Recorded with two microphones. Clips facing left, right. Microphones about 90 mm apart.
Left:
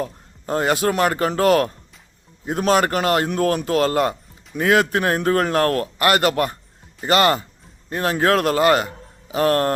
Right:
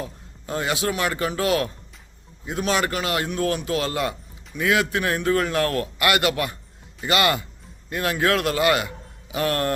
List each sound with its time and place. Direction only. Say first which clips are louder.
0.0 s a man's voice: left 6 dB; 45° left (ahead or behind)